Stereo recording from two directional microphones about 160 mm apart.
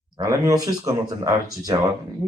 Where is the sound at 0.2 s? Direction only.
20° right (ahead or behind).